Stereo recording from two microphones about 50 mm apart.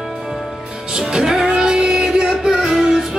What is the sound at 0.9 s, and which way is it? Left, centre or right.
Music, centre.